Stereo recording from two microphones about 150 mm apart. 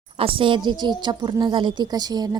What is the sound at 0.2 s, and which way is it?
A woman's voice, 35° right (ahead or behind).